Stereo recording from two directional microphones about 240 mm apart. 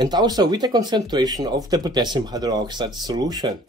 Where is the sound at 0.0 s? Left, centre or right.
Centre.